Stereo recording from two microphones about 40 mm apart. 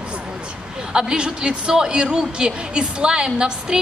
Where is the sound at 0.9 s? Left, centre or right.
Right.